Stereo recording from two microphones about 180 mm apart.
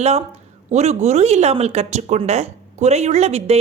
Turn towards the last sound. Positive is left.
turn(degrees=-35)  # may be behind; listen again after turning